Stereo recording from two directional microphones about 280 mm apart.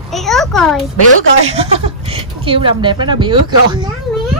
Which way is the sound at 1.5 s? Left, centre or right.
Right.